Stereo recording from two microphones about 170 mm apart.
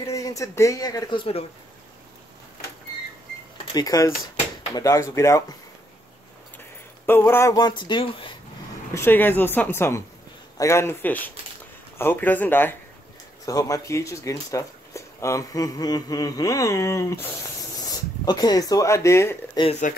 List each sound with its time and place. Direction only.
0.0 s speech: 20° left (ahead or behind)
3.6 s speech: 20° left (ahead or behind)
7.1 s speech: 15° left (ahead or behind); by 8.4 s 30° left (ahead or behind)
8.9 s speech: 10° left (ahead or behind)
19.8 s speech: 50° left (ahead or behind)